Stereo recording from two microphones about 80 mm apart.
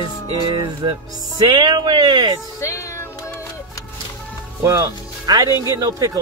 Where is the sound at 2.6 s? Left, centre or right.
Left.